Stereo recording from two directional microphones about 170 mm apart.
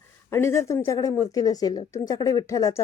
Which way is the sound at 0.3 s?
15° left (ahead or behind).